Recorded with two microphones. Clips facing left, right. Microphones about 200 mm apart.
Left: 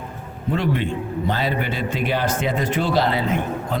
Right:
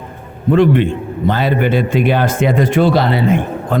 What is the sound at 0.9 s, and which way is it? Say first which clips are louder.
Speech: right 6 dB; 55° right (ahead or behind).